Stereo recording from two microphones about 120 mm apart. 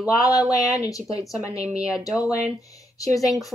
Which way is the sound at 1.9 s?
5° right (ahead or behind).